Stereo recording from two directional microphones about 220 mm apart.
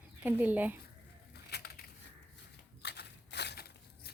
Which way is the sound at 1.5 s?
45° left (ahead or behind).